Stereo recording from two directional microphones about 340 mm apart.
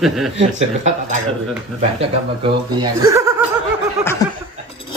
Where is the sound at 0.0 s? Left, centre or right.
Centre.